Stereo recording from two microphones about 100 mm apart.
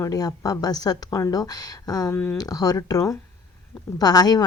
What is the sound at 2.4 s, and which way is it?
A woman's voice, 40° left (ahead or behind).